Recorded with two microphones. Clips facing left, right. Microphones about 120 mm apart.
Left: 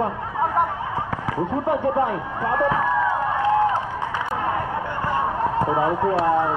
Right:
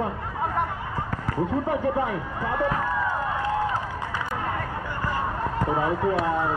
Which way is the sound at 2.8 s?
20° left (ahead or behind).